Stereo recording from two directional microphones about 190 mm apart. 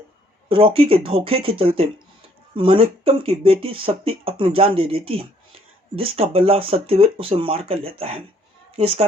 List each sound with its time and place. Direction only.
0.4 s a woman's voice: 30° right (ahead or behind)